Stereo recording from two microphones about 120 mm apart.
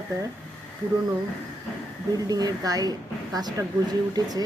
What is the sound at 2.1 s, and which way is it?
A woman's voice, 30° right (ahead or behind).